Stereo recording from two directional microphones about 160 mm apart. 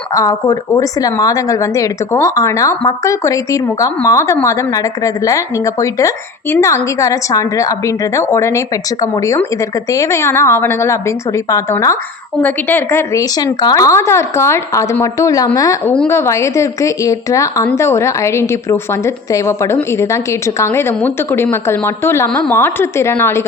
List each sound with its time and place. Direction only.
0.1 s a woman's voice: 20° left (ahead or behind)